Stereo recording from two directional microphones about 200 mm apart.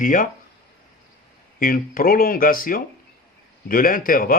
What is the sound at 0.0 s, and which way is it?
Speech, 40° left (ahead or behind).